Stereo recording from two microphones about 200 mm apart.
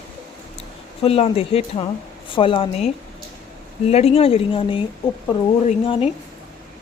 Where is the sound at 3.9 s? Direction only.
30° left (ahead or behind).